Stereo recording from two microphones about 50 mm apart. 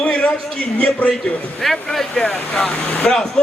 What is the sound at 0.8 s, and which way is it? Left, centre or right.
Speech, left.